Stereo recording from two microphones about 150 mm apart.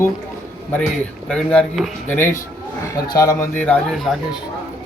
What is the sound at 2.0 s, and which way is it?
A man's voice, 15° left (ahead or behind).